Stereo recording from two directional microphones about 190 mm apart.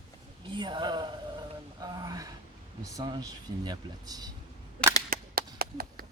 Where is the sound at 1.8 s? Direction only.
20° right (ahead or behind).